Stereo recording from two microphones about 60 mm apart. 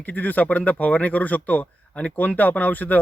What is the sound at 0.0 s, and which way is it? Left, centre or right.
Speech, left.